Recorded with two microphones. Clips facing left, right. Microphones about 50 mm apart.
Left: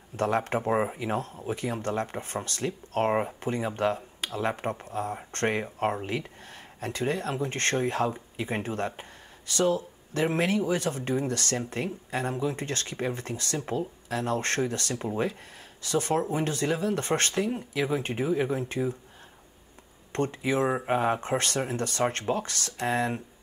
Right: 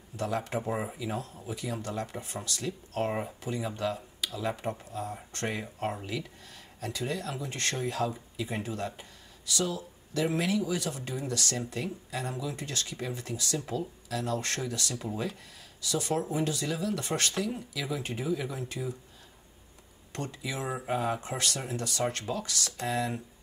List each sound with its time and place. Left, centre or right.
0.1 s speech: left
20.1 s speech: left